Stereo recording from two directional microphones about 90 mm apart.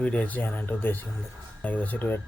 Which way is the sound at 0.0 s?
15° left (ahead or behind).